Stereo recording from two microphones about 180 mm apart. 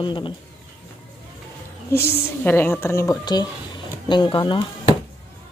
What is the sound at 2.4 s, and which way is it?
A woman's voice, 10° left (ahead or behind).